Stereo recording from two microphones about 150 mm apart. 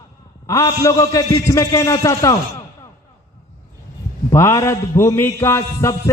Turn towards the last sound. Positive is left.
turn(degrees=20)  # may be behind; listen again after turning